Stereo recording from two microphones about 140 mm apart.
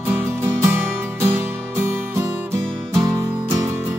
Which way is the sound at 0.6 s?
15° right (ahead or behind).